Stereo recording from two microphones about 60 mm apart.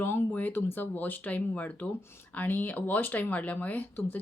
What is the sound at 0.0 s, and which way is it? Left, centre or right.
Speech, left.